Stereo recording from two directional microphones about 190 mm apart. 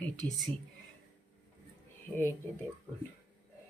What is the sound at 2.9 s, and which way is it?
Speech, 10° right (ahead or behind).